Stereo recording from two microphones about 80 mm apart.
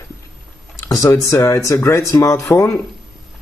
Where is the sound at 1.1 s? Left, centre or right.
Left.